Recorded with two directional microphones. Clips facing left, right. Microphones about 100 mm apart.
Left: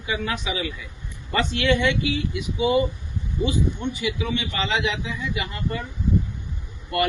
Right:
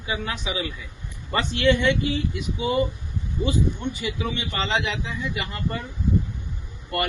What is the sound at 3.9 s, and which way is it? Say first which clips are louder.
Speech: left 2 dB; 40° right (ahead or behind).